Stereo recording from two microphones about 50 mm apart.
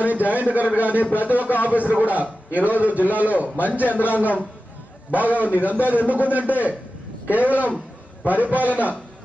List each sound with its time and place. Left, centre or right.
0.0 s a man's voice: right
3.9 s a man's voice: left
5.4 s a man's voice: right